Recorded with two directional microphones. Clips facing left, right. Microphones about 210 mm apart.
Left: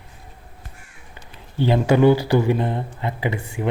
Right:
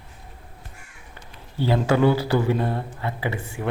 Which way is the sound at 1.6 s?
20° left (ahead or behind).